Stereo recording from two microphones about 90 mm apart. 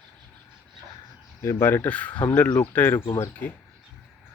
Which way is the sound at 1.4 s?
30° left (ahead or behind).